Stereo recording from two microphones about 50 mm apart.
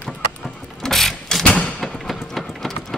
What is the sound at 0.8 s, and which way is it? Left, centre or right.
Gears, centre.